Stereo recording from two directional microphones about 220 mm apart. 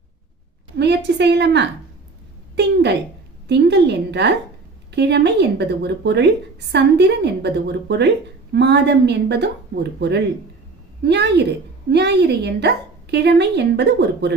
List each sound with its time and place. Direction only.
0.8 s a woman's voice: 50° right (ahead or behind)